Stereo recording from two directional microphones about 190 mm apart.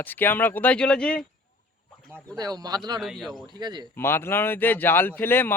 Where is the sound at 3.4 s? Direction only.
25° right (ahead or behind).